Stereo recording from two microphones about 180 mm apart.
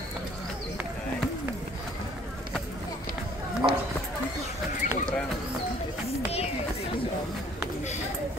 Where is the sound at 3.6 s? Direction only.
20° right (ahead or behind).